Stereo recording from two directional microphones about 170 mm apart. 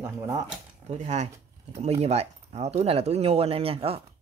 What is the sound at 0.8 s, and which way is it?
Speech, 40° right (ahead or behind).